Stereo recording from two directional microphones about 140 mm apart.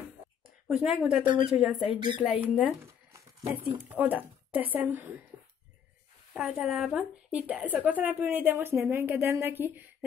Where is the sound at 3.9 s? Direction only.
10° right (ahead or behind).